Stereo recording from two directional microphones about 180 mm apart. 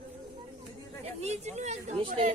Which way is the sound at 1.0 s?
35° right (ahead or behind).